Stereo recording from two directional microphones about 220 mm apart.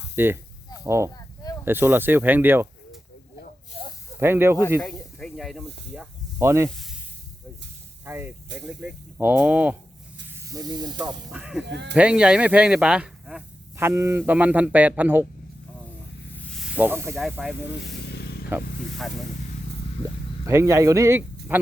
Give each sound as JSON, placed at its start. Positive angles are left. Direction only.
{"t": 0.2, "sound": "speech", "side_deg": -10}
{"t": 4.2, "sound": "speech", "side_deg": -10}
{"t": 4.8, "sound": "speech", "side_deg": 5}
{"t": 5.9, "sound": "snake", "side_deg": -10}
{"t": 8.0, "sound": "speech", "side_deg": -10}
{"t": 11.3, "sound": "speech", "side_deg": -5}
{"t": 11.6, "sound": "speech", "side_deg": -50}
{"t": 11.9, "sound": "speech", "side_deg": -5}
{"t": 16.5, "sound": "snake", "side_deg": 0}
{"t": 17.2, "sound": "speech", "side_deg": 0}
{"t": 17.7, "sound": "vehicle", "side_deg": 50}
{"t": 18.4, "sound": "snake", "side_deg": -5}
{"t": 20.4, "sound": "speech", "side_deg": -15}